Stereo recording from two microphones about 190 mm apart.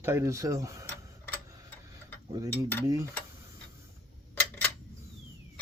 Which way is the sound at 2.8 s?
15° right (ahead or behind).